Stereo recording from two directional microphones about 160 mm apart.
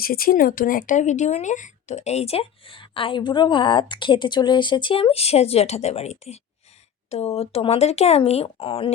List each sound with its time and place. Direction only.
0.0 s speech: 65° left (ahead or behind); by 8.9 s 35° left (ahead or behind)